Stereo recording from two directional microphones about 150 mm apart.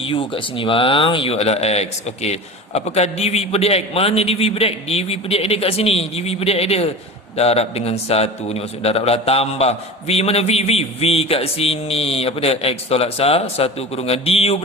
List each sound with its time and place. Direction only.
0.0 s a man's voice: 35° left (ahead or behind)